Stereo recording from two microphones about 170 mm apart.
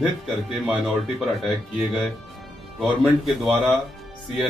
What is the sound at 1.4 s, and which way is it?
Speech, centre (ahead or behind).